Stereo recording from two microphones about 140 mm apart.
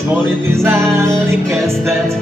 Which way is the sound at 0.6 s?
20° right (ahead or behind).